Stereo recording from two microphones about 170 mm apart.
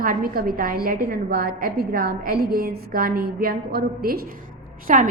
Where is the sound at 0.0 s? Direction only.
60° right (ahead or behind).